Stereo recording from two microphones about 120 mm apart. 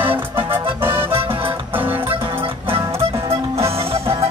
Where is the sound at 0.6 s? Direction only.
20° right (ahead or behind).